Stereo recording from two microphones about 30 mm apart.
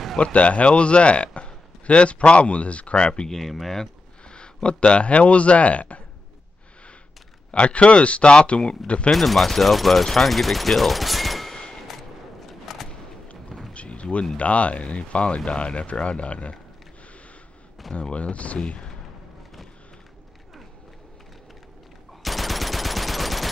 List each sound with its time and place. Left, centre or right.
0.2 s speech: left
3.3 s speech: centre
4.3 s speech: left
7.5 s speech: left
8.8 s speech: left
9.1 s speech: centre
11.9 s a sound: centre
13.7 s artillery fire: left
14.3 s speech: left
18.1 s speech: left
18.6 s speech: left
22.2 s machine gun: centre